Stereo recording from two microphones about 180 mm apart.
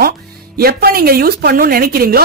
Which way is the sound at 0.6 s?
60° right (ahead or behind).